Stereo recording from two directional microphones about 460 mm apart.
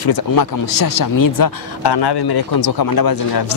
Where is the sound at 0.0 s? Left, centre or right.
Left.